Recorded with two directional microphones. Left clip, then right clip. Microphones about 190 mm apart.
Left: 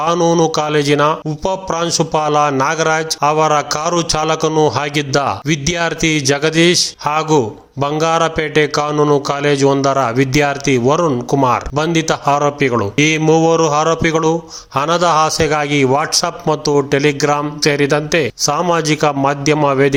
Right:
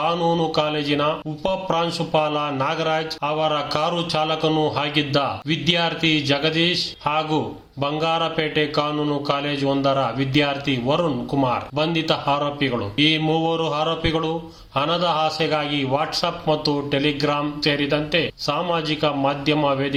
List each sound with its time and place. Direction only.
0.0 s a man's voice: 50° left (ahead or behind)